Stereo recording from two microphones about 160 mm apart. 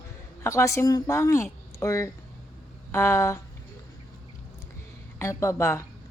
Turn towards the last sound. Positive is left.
turn(degrees=20)  # may be behind; listen again after turning